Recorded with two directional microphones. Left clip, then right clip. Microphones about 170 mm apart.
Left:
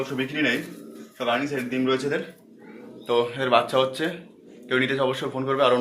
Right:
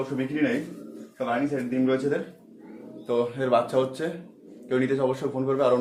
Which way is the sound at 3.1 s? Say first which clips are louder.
Left 2 dB; 10° left (ahead or behind).